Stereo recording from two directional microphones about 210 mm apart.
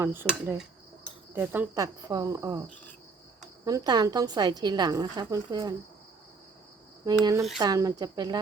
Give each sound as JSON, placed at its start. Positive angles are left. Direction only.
{"t": 0.0, "sound": "speech", "side_deg": -10}
{"t": 0.5, "sound": "cricket", "side_deg": 0}
{"t": 1.3, "sound": "a woman's voice", "side_deg": -10}
{"t": 7.0, "sound": "speech", "side_deg": -15}